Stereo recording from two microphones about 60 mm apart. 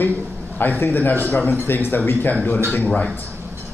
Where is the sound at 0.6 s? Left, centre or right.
Left.